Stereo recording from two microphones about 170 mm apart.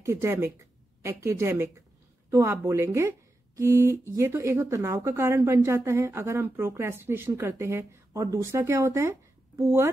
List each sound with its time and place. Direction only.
0.0 s speech: 15° right (ahead or behind)